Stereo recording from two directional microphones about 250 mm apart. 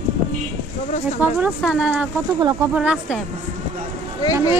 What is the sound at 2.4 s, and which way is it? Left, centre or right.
Speech, centre.